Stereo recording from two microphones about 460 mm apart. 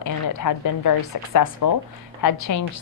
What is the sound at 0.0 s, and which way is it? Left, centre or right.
A woman's voice, left.